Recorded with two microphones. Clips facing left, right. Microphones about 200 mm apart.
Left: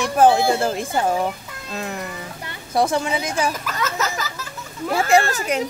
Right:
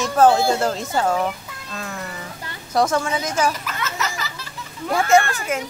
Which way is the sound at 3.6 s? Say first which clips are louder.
Left 3 dB; 45° left (ahead or behind).